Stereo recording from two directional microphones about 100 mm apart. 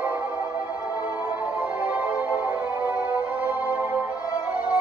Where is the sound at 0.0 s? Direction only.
20° right (ahead or behind).